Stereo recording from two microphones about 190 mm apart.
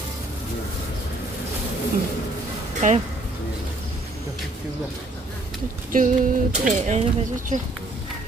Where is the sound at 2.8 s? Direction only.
40° right (ahead or behind).